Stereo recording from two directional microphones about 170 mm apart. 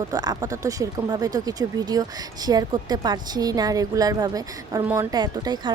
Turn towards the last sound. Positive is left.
turn(degrees=-25)  # may be behind; listen again after turning